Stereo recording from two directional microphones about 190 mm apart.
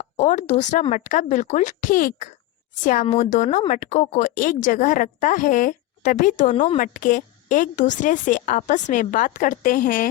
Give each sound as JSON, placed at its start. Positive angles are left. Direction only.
{"t": 0.0, "sound": "speech", "side_deg": 40}